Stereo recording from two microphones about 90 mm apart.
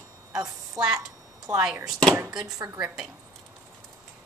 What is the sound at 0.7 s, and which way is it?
Speech, 50° right (ahead or behind).